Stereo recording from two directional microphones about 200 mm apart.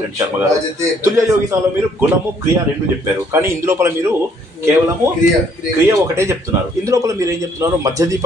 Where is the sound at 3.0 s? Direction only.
15° right (ahead or behind).